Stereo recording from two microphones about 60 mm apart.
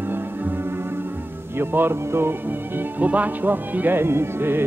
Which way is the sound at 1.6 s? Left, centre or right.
Right.